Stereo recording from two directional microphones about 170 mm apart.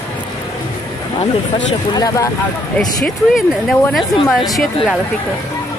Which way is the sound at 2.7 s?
5° left (ahead or behind).